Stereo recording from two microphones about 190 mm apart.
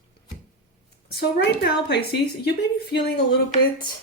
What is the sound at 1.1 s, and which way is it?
A woman's voice, 60° left (ahead or behind).